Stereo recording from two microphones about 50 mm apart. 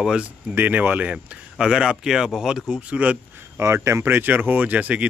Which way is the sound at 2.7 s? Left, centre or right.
Right.